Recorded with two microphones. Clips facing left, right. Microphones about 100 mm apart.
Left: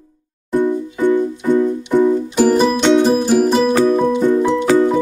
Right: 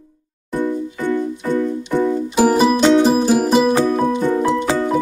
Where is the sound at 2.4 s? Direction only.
5° right (ahead or behind).